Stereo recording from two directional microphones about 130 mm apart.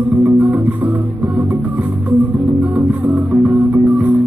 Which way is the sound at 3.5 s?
20° right (ahead or behind).